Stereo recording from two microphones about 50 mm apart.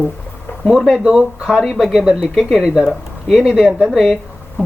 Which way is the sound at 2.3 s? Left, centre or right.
Centre.